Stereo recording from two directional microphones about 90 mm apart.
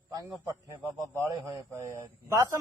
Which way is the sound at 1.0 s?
30° right (ahead or behind).